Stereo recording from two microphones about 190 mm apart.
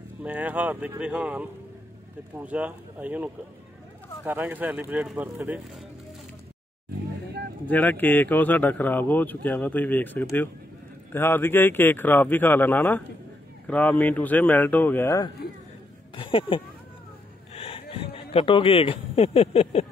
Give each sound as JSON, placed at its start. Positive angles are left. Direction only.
{"t": 0.2, "sound": "speech", "side_deg": -10}
{"t": 7.6, "sound": "speech", "side_deg": 10}
{"t": 16.2, "sound": "speech", "side_deg": 25}